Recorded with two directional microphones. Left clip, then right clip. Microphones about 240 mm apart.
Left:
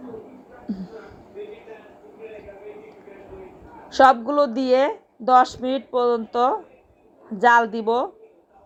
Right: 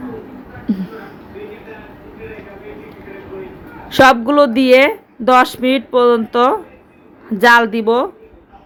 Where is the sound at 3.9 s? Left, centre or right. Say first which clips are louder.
Right 6 dB; right.